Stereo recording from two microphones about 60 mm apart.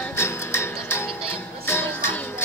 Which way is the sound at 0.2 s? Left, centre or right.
Left.